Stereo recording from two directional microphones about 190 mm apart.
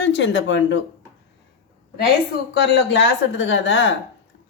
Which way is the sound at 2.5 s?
75° left (ahead or behind).